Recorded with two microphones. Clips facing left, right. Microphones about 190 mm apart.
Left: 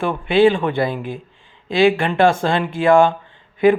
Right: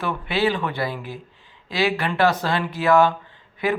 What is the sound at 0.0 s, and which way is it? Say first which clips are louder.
A man's voice: left 8 dB; 25° left (ahead or behind).